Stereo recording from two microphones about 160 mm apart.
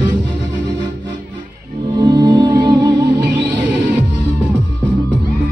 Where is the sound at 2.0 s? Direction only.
25° right (ahead or behind).